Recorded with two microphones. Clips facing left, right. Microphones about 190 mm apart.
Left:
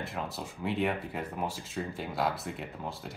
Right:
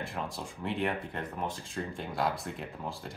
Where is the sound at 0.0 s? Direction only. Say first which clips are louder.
Even; centre (ahead or behind).